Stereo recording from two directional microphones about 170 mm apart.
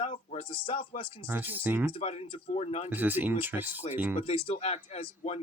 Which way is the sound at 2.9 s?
10° right (ahead or behind).